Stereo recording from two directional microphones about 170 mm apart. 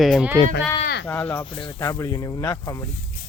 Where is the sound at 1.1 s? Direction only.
10° left (ahead or behind).